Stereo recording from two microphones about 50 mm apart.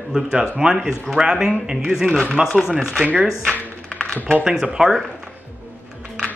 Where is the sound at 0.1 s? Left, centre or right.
Centre.